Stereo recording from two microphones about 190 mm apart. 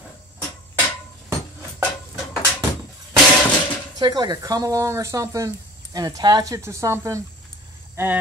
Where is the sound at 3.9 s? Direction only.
20° right (ahead or behind).